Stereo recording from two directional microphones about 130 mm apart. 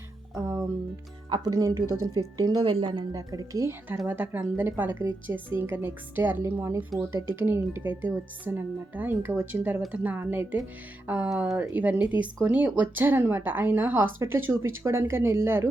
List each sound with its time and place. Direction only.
0.3 s music: 30° right (ahead or behind)
1.3 s speech: 30° right (ahead or behind)
3.2 s speech: 25° right (ahead or behind)